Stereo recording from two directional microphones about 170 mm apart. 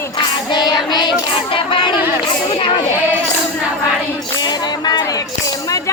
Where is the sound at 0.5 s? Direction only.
25° left (ahead or behind).